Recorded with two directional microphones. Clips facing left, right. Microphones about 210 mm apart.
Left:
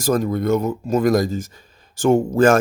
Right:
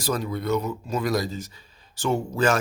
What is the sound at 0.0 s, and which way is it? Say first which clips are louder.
Speech: left 8 dB; 45° left (ahead or behind).